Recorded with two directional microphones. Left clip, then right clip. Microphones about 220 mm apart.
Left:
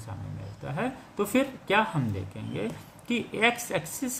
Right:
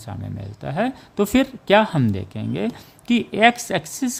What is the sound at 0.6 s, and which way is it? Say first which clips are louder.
A woman's voice: right 9 dB; 55° right (ahead or behind).